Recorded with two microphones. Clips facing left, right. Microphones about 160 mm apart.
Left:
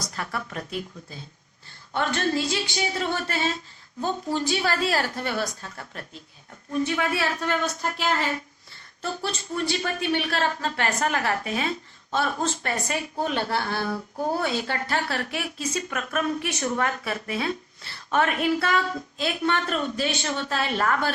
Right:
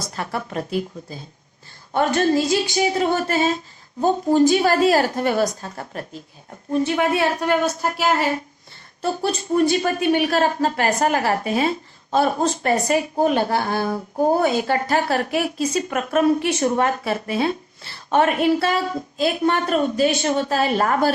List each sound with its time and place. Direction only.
0.0 s a woman's voice: 30° right (ahead or behind)
7.3 s a woman's voice: 45° right (ahead or behind)